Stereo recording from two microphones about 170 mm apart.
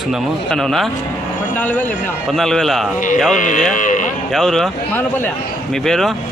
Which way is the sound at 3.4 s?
50° left (ahead or behind).